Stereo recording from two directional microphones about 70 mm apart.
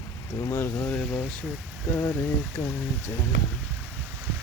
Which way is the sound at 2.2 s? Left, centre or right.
Left.